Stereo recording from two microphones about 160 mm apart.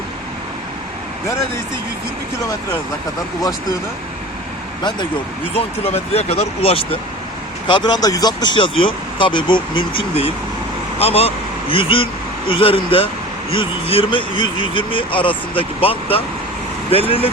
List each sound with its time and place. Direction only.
5.5 s speech: 40° left (ahead or behind)
7.7 s speech: 25° left (ahead or behind)